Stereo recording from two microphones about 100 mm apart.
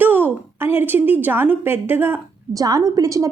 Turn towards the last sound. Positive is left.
turn(degrees=-35)  # may be behind; listen again after turning